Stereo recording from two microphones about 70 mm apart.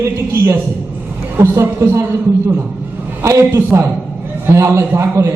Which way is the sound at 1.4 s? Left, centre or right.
Right.